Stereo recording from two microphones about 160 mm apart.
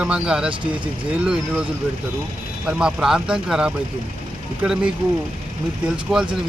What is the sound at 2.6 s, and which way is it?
A man's voice, 5° right (ahead or behind).